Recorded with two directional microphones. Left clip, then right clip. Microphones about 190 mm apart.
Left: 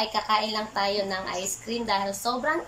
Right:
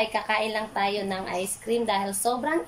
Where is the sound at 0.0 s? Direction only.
15° right (ahead or behind).